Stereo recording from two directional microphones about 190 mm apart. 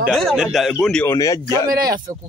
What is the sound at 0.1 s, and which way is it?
Speech, centre (ahead or behind).